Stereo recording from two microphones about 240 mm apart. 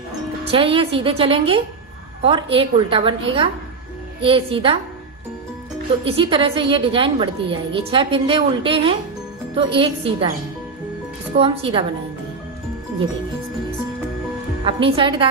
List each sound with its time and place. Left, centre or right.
0.5 s a woman's voice: right
6.1 s a woman's voice: right
11.3 s a woman's voice: right
14.6 s a woman's voice: right